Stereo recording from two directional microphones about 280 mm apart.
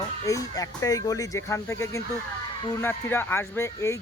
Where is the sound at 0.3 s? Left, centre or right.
Centre.